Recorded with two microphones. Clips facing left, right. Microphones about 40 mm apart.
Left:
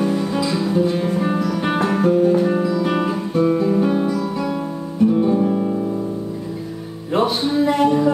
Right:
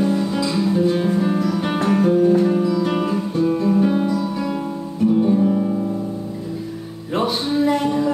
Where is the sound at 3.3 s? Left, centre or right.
Left.